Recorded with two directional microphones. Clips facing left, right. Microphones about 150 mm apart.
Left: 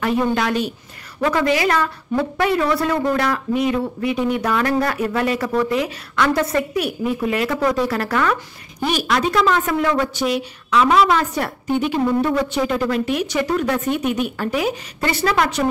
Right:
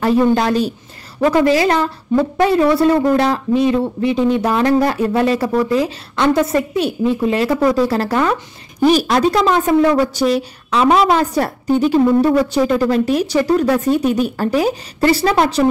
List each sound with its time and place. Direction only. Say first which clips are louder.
0.0 s a woman's voice: right 5 dB; 35° right (ahead or behind)
8.8 s a woman's voice: right 7 dB; 40° right (ahead or behind)